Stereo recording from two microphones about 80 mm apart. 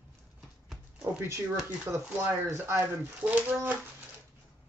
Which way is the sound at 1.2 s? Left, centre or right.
Right.